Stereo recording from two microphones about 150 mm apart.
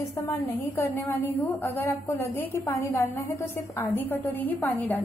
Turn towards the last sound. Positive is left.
turn(degrees=15)  # may be behind; listen again after turning